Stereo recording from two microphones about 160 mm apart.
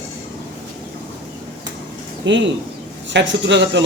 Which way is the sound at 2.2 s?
90° right.